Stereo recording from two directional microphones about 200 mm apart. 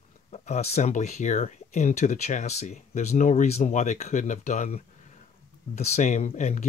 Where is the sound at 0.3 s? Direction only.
30° left (ahead or behind).